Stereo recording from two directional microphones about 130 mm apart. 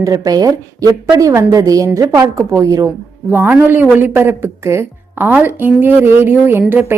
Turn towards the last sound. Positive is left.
turn(degrees=-15)  # may be behind; listen again after turning